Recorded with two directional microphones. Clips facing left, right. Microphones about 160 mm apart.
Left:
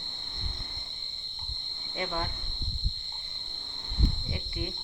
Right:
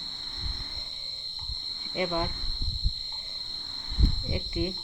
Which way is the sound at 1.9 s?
15° right (ahead or behind).